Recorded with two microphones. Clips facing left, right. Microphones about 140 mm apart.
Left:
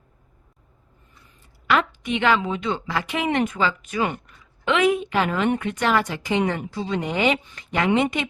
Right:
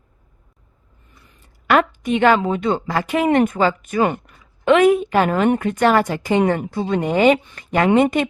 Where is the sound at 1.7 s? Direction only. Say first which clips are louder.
Right 5 dB; 45° right (ahead or behind).